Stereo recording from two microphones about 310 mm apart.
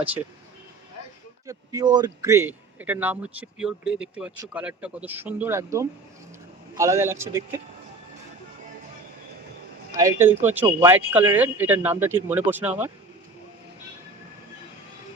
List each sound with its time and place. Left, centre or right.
1.5 s speech: centre
10.0 s speech: centre